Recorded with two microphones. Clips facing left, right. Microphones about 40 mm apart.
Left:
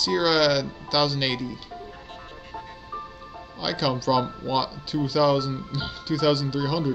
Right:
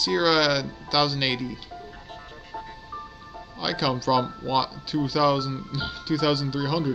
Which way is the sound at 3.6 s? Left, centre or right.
Centre.